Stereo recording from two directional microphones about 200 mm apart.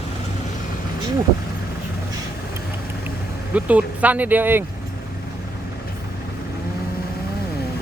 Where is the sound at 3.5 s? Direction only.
5° right (ahead or behind).